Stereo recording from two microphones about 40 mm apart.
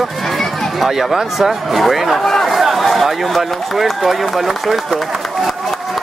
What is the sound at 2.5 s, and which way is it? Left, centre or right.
Speech, centre.